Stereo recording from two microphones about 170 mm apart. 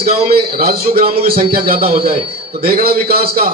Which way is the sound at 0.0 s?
65° right (ahead or behind).